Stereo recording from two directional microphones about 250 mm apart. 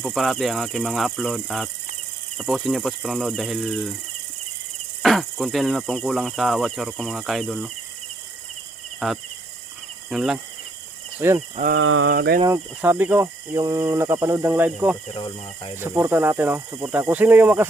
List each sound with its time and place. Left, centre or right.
0.0 s speech: centre
5.0 s speech: centre
9.0 s speech: centre
11.2 s cricket: centre
11.5 s cricket: right
11.8 s a sound: right
12.4 s cricket: centre
15.1 s speech: centre
15.7 s cricket: centre